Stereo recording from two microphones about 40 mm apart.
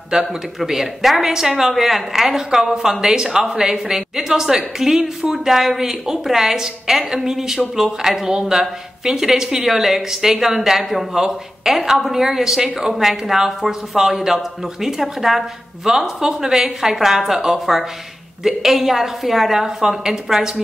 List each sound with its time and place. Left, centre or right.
0.1 s a woman's voice: centre
0.6 s a woman's voice: centre